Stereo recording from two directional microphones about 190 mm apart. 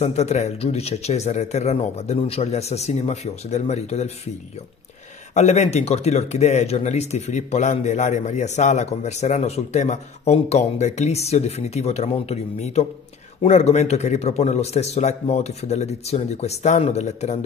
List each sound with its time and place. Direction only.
0.0 s speech: 35° left (ahead or behind)
5.3 s speech: 35° left (ahead or behind)